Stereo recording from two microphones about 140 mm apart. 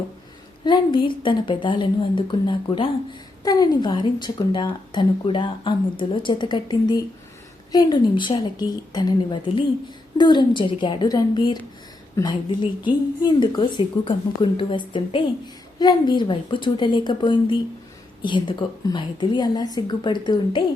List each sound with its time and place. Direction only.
0.6 s a woman's voice: 35° left (ahead or behind)